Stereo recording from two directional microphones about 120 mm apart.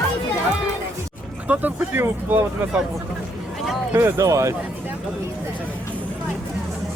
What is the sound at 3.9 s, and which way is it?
Speech, 20° right (ahead or behind).